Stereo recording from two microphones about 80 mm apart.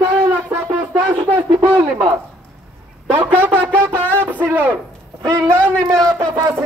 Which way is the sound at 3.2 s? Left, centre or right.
Right.